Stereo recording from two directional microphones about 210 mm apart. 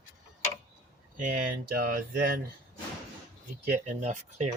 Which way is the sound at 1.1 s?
40° right (ahead or behind).